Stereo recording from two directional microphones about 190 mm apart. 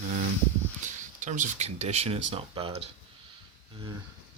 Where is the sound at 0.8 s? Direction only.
40° right (ahead or behind).